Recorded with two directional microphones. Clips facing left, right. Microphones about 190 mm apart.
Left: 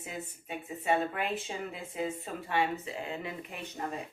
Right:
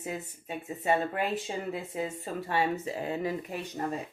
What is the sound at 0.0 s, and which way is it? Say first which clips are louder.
Speech: right 4 dB; 40° right (ahead or behind).